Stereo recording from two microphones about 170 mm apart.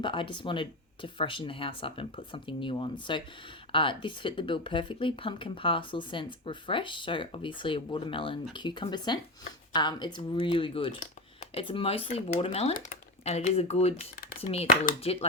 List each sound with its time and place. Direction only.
0.0 s speech: 30° left (ahead or behind)
12.7 s speech: 55° left (ahead or behind)
13.2 s speech: 40° left (ahead or behind)
15.0 s speech: 35° left (ahead or behind)